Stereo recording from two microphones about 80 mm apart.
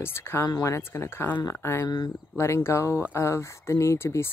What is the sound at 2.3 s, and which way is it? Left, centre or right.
Speech, left.